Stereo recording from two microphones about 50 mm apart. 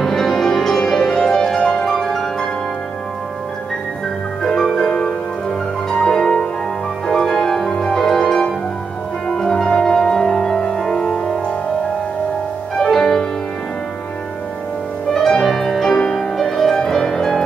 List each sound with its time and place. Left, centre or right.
0.0 s music: centre
4.4 s music: centre
12.8 s music: centre
15.1 s music: centre